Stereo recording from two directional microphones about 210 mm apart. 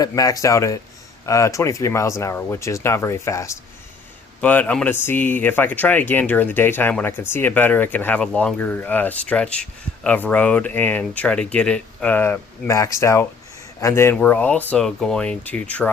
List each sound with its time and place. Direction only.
0.0 s speech: 15° left (ahead or behind)